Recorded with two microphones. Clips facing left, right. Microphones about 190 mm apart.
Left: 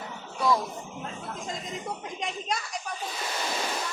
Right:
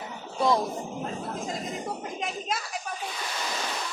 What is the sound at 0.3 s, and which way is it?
Music, 25° right (ahead or behind).